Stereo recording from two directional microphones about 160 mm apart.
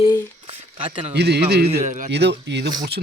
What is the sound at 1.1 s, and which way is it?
Speech, 90° right.